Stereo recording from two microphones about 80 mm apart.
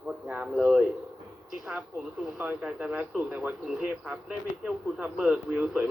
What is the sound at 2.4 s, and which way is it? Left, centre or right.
Speech, centre.